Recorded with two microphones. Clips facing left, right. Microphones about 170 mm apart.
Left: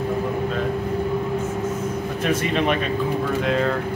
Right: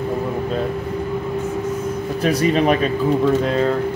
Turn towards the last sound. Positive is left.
turn(degrees=-40)  # may be behind; listen again after turning